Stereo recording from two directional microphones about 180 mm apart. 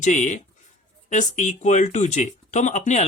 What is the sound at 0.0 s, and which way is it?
Speech, 45° left (ahead or behind).